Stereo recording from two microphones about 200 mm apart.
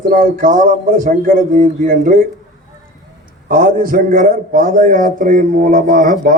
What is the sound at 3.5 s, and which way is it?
A man's voice, 45° right (ahead or behind).